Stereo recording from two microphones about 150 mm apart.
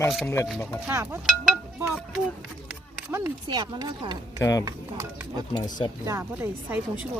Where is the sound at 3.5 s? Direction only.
30° right (ahead or behind).